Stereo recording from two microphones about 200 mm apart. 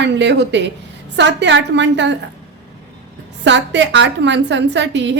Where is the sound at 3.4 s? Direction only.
65° right (ahead or behind).